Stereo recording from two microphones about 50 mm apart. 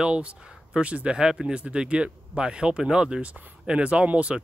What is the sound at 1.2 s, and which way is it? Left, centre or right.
Speech, centre.